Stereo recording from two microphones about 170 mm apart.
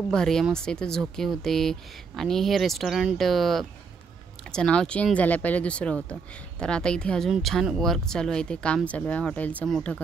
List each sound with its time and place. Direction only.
0.1 s speech: 5° left (ahead or behind)